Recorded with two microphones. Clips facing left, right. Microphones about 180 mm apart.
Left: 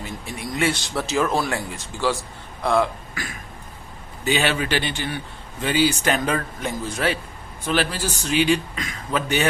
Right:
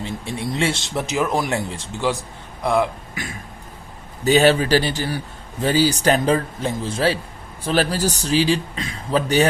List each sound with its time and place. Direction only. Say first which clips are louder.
0.0 s speech: right 5 dB; 25° right (ahead or behind)
4.2 s speech: right 7 dB; 40° right (ahead or behind)